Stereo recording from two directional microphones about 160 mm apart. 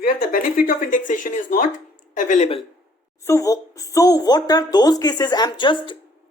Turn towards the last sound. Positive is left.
turn(degrees=30)  # may be behind; listen again after turning